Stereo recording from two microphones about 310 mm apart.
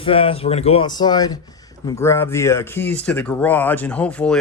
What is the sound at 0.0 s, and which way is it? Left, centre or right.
Speech, centre.